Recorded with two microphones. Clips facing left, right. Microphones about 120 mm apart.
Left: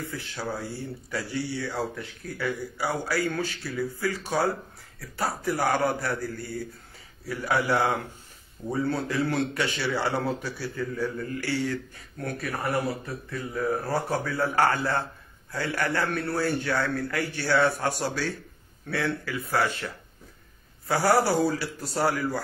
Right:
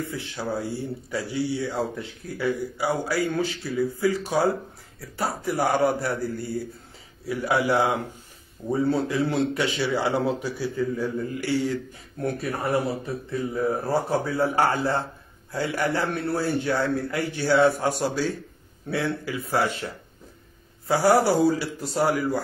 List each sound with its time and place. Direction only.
0.0 s speech: 15° right (ahead or behind)
9.0 s speech: 20° right (ahead or behind)